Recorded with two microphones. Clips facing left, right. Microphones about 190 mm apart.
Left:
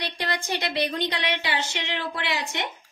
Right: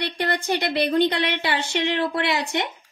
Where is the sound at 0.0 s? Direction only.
60° right (ahead or behind).